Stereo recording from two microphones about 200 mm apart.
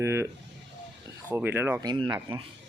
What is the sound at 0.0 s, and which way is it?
Speech, 15° right (ahead or behind).